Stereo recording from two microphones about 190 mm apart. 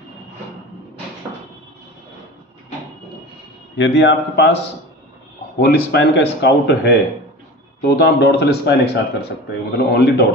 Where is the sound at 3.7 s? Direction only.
75° left (ahead or behind).